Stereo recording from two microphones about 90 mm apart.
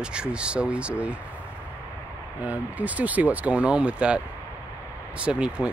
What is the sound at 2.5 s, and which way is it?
Speech, 15° right (ahead or behind).